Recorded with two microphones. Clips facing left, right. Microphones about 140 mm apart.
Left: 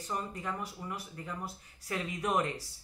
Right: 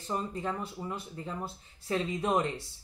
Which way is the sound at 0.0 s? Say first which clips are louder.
Right 4 dB; 25° right (ahead or behind).